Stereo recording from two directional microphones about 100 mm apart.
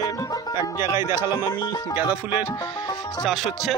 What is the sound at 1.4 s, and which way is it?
Speech, 45° left (ahead or behind).